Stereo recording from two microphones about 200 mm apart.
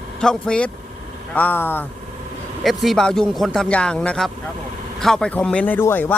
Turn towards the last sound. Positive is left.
turn(degrees=10)  # may be behind; listen again after turning